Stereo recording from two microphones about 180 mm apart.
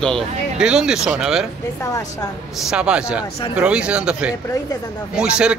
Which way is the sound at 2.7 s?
5° right (ahead or behind).